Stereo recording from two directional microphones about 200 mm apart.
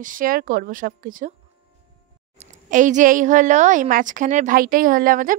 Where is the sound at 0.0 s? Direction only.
40° right (ahead or behind).